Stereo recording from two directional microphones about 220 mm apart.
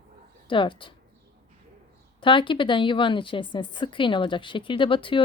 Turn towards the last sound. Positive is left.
turn(degrees=25)  # may be behind; listen again after turning